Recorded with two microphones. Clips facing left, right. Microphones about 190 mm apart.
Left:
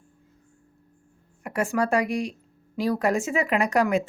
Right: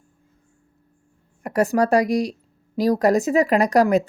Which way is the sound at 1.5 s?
40° right (ahead or behind).